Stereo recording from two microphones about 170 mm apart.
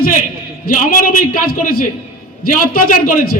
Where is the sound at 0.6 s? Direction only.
50° left (ahead or behind).